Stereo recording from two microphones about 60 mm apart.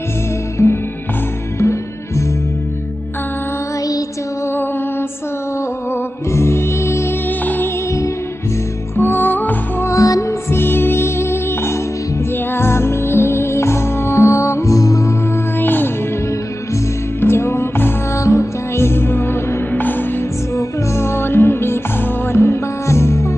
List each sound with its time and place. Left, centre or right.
0.6 s music: left
1.6 s music: left
6.3 s music: left
7.2 s music: left
8.9 s music: left
9.8 s music: left
10.5 s music: left
15.6 s music: left
17.2 s music: left
18.1 s music: left
20.5 s music: left